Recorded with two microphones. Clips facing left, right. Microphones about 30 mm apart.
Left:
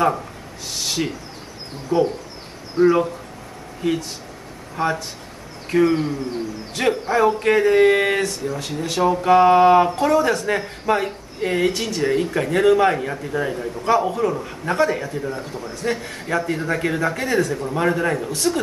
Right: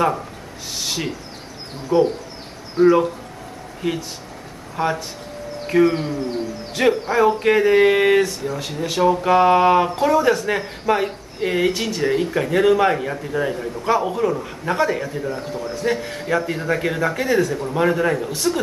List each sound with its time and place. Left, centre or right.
0.7 s a sound: centre
1.9 s a man's voice: right
2.8 s speech: centre
4.7 s speech: centre
15.5 s a man's voice: right
15.8 s speech: centre